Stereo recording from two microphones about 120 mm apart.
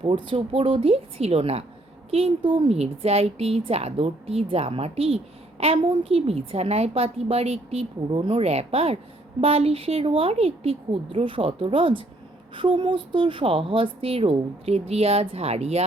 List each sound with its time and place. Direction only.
0.0 s speech: 45° right (ahead or behind)
2.7 s a woman's voice: 60° right (ahead or behind)